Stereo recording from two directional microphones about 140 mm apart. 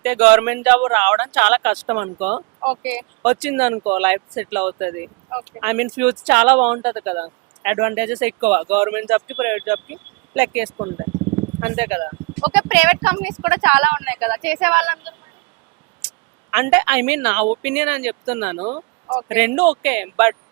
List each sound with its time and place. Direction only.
0.0 s speech: 10° right (ahead or behind)
10.8 s speech: 20° right (ahead or behind)